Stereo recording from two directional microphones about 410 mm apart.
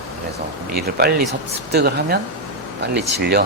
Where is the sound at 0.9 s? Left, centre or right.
Right.